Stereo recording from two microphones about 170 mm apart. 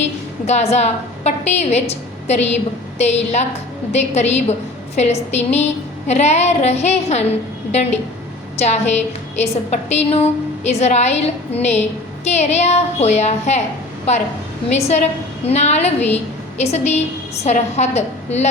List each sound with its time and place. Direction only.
0.4 s a woman's voice: 40° left (ahead or behind)